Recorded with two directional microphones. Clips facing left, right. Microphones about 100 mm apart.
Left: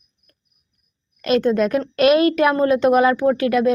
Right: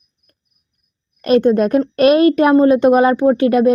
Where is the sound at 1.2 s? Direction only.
25° right (ahead or behind).